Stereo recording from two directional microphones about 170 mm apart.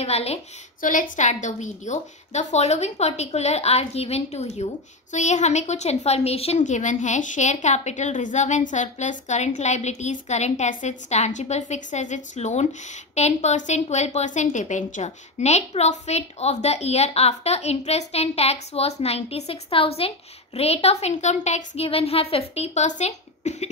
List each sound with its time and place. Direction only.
0.0 s a woman's voice: 40° left (ahead or behind)
0.7 s a woman's voice: 50° left (ahead or behind)